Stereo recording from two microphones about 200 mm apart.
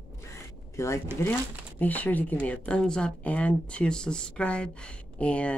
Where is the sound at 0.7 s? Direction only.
15° left (ahead or behind).